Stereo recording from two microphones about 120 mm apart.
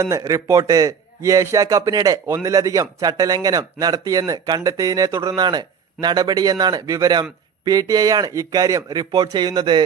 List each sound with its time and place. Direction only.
0.0 s a man's voice: 30° right (ahead or behind)